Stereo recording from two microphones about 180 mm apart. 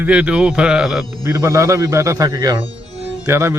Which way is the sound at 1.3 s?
15° right (ahead or behind).